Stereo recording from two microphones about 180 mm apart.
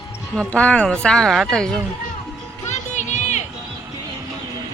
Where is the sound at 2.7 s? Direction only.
40° left (ahead or behind).